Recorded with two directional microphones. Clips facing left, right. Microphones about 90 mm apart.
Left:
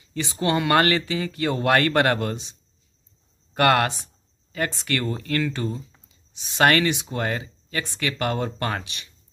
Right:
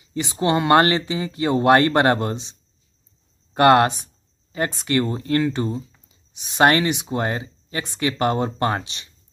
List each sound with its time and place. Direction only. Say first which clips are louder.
0.0 s speech: right 3 dB; 20° right (ahead or behind)
3.5 s speech: right 5 dB; 25° right (ahead or behind)